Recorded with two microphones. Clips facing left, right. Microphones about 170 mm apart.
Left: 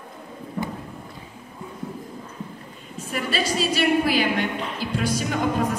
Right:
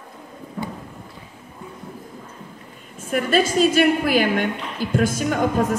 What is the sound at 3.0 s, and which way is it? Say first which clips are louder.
A woman's voice: right 7 dB; 50° right (ahead or behind).